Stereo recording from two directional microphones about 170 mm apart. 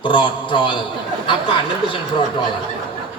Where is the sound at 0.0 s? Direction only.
30° left (ahead or behind).